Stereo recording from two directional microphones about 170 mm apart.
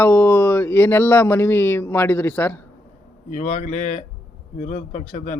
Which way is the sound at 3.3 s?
45° left (ahead or behind).